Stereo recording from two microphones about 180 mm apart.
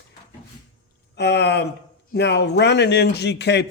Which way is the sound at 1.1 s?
70° left (ahead or behind).